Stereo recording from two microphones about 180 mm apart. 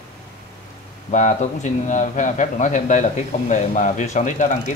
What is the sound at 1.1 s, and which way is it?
Speech, 45° left (ahead or behind).